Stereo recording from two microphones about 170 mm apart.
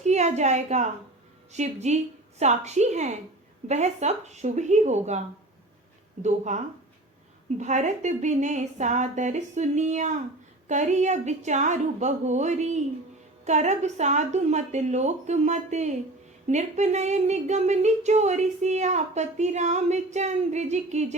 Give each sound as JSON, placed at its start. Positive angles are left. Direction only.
{"t": 0.0, "sound": "a woman's voice", "side_deg": -40}
{"t": 6.2, "sound": "speech", "side_deg": -45}
{"t": 7.6, "sound": "speech", "side_deg": -45}